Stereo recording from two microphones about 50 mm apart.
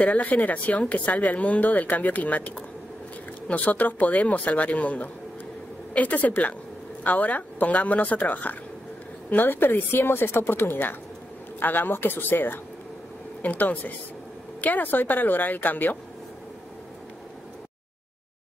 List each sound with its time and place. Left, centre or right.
0.0 s a woman's voice: left
13.4 s speech: left